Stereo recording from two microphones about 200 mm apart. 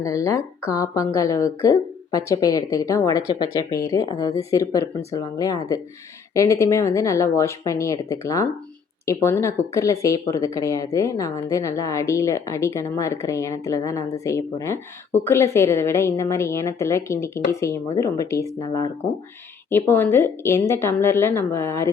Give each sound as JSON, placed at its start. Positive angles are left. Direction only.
{"t": 0.0, "sound": "speech", "side_deg": 15}